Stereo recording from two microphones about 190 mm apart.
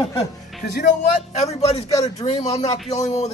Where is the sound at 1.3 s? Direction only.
35° left (ahead or behind).